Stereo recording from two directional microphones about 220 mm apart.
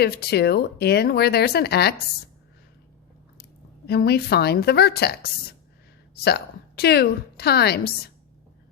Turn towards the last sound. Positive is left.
turn(degrees=45)  # may be behind; listen again after turning